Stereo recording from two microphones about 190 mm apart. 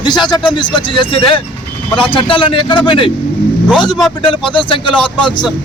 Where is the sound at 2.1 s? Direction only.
25° left (ahead or behind).